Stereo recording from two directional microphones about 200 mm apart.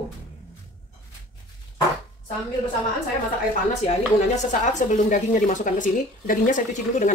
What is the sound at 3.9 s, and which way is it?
Speech, 35° left (ahead or behind).